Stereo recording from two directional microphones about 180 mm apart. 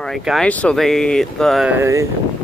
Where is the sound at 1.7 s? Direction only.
15° right (ahead or behind).